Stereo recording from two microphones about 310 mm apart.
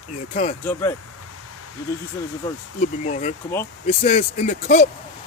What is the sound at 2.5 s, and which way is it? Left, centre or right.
Speech, left.